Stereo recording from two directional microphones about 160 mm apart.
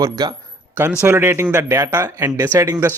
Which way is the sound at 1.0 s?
10° right (ahead or behind).